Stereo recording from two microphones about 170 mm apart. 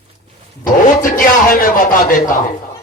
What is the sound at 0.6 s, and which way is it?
Speech, 55° left (ahead or behind).